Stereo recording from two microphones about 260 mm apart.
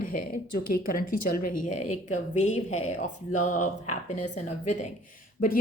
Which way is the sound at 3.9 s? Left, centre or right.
Left.